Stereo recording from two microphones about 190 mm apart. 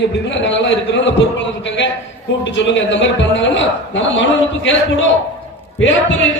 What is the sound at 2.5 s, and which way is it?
A man's voice, 70° left (ahead or behind).